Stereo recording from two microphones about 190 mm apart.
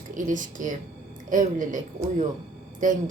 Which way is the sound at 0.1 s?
45° right (ahead or behind).